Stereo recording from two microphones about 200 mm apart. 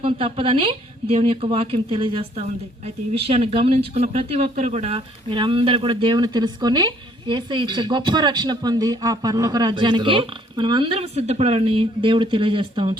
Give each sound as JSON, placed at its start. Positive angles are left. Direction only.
{"t": 0.0, "sound": "a woman's voice", "side_deg": -25}